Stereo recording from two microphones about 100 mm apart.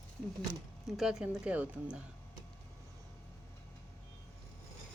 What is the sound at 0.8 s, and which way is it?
A woman's voice, 5° right (ahead or behind).